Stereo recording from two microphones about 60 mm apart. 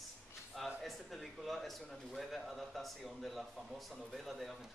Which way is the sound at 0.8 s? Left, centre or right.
Centre.